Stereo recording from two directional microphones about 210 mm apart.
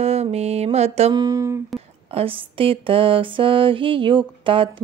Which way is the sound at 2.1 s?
25° right (ahead or behind).